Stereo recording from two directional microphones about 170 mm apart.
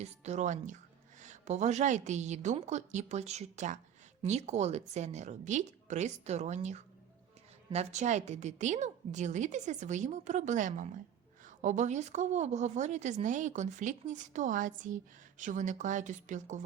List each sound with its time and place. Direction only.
0.0 s a woman's voice: 40° right (ahead or behind)